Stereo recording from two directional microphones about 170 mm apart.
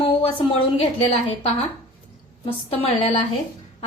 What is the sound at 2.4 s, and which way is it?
Speech, 35° left (ahead or behind).